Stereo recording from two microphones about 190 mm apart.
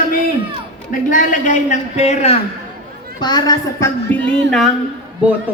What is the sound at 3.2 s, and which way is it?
Speech, 20° left (ahead or behind).